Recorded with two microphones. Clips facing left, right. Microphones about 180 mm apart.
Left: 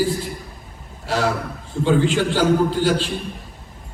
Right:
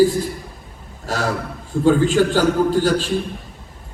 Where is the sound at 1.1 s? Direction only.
45° right (ahead or behind).